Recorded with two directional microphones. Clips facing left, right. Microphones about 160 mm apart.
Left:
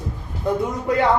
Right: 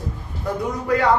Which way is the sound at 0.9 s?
20° left (ahead or behind).